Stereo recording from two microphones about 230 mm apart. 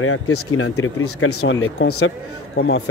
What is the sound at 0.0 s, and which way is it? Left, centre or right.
Speech, left.